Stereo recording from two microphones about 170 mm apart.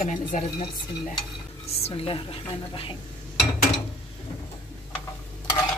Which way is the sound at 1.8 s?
35° left (ahead or behind).